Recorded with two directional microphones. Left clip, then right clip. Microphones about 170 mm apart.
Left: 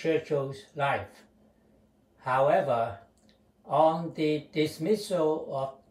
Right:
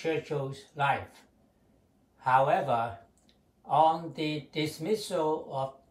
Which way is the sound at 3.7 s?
30° right (ahead or behind).